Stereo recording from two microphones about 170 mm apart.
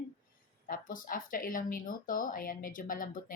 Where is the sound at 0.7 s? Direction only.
55° left (ahead or behind).